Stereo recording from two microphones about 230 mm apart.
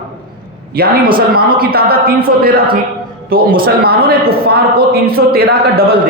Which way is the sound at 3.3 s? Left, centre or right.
Right.